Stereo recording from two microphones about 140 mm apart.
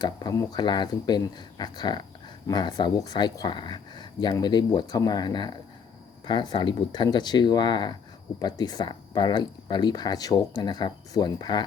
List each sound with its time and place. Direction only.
0.0 s speech: 25° left (ahead or behind)